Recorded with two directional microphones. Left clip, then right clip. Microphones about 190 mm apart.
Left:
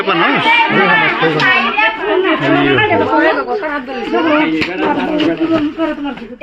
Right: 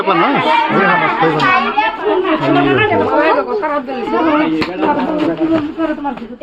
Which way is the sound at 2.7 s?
25° right (ahead or behind).